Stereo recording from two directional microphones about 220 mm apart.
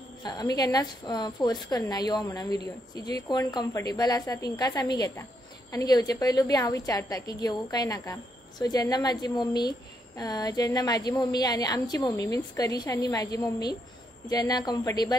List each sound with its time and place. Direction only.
0.2 s a woman's voice: 20° left (ahead or behind)